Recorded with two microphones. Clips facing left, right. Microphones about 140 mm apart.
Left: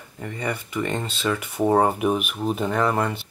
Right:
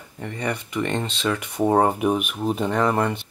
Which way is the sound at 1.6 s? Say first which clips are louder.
Even; 10° right (ahead or behind).